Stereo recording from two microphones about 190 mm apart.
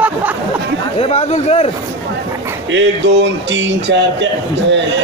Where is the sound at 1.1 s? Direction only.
35° left (ahead or behind).